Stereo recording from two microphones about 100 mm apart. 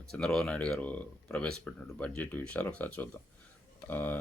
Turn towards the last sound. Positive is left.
turn(degrees=20)  # may be behind; listen again after turning